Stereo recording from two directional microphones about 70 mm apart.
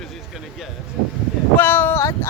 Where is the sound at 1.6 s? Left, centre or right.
Left.